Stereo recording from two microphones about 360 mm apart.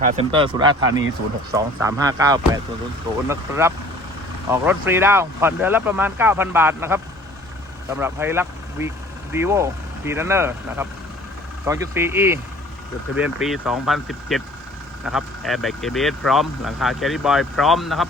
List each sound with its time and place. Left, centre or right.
0.0 s speech: centre